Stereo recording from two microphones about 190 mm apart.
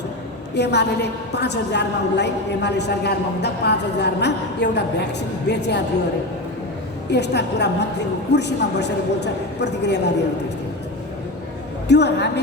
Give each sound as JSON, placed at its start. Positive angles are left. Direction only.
{"t": 0.5, "sound": "a woman's voice", "side_deg": 65}
{"t": 7.1, "sound": "a woman's voice", "side_deg": 60}
{"t": 11.9, "sound": "a woman's voice", "side_deg": 65}